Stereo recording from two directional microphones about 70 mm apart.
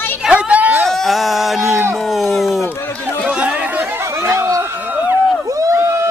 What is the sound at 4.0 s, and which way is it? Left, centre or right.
Chatter, right.